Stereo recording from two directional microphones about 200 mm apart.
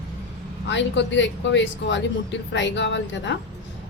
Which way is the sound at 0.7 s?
65° left (ahead or behind).